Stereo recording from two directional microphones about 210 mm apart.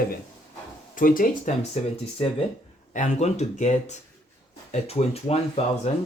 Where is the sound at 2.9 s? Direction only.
35° left (ahead or behind).